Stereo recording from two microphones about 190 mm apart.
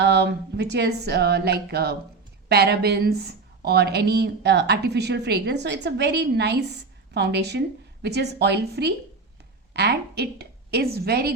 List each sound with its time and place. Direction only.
0.0 s a woman's voice: 60° right (ahead or behind)